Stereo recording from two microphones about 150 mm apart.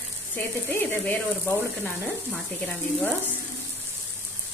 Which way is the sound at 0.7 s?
15° left (ahead or behind).